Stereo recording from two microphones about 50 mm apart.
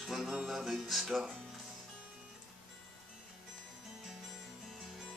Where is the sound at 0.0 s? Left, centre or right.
Centre.